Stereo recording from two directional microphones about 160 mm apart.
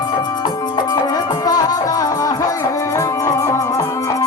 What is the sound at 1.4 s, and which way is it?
Music, 25° left (ahead or behind).